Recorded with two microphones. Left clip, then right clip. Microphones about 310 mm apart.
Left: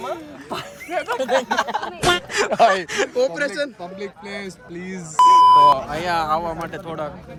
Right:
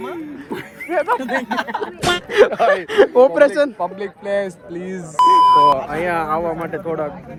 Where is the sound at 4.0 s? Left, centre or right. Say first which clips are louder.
Right 9 dB; right.